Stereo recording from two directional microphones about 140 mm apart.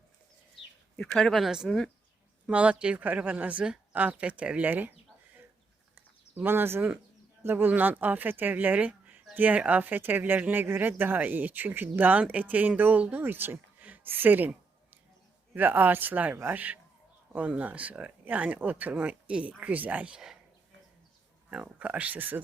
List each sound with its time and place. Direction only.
0.9 s speech: 5° left (ahead or behind); by 4.9 s 15° right (ahead or behind)
6.3 s speech: 15° right (ahead or behind)
15.5 s speech: 15° right (ahead or behind)
21.5 s speech: 10° right (ahead or behind)